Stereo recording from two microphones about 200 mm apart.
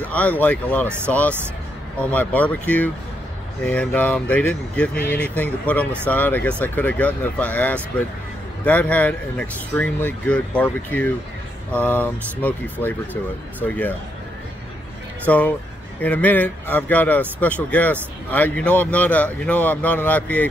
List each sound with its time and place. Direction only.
0.0 s speech: 5° left (ahead or behind)
15.2 s speech: 10° left (ahead or behind)